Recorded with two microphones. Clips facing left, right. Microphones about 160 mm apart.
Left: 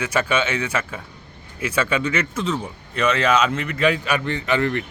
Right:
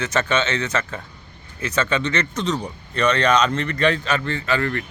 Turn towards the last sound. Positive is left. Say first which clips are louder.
# left 2 dB
turn(degrees=20)  # may be behind; listen again after turning